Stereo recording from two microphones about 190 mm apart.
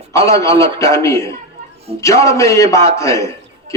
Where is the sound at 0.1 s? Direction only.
15° left (ahead or behind).